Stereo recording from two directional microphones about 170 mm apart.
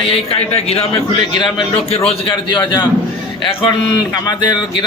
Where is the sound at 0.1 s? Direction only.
35° left (ahead or behind).